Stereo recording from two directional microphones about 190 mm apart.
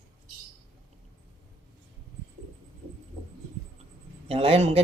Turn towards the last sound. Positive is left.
turn(degrees=-30)  # may be behind; listen again after turning